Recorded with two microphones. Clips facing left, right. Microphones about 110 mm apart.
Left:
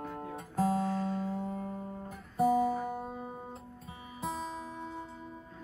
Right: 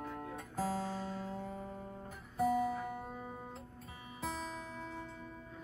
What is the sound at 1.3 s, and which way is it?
Music, 25° left (ahead or behind).